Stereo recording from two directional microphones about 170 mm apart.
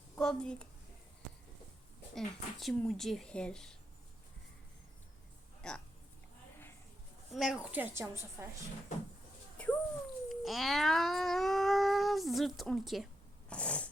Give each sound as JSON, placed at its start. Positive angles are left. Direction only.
{"t": 0.2, "sound": "a woman's voice", "side_deg": 5}
{"t": 2.1, "sound": "speech", "side_deg": 0}
{"t": 5.6, "sound": "speech", "side_deg": 5}
{"t": 7.3, "sound": "a woman's voice", "side_deg": -5}
{"t": 9.6, "sound": "a sound", "side_deg": 5}
{"t": 13.5, "sound": "snort", "side_deg": 5}